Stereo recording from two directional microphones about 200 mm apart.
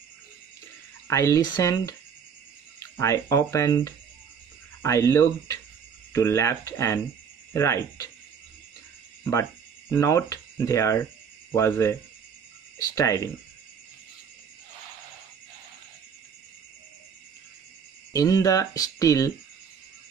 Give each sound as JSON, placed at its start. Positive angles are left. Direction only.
{"t": 1.0, "sound": "speech", "side_deg": 15}
{"t": 9.2, "sound": "speech", "side_deg": 15}
{"t": 18.1, "sound": "speech", "side_deg": 15}